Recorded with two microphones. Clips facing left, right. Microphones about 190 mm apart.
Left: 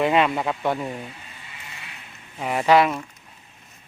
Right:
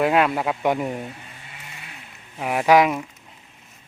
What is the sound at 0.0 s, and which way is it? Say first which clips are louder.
Speech: right 1 dB; 5° right (ahead or behind).